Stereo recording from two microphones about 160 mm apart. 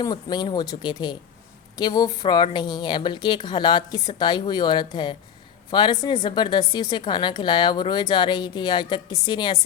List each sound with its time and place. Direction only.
0.0 s a woman's voice: 25° left (ahead or behind)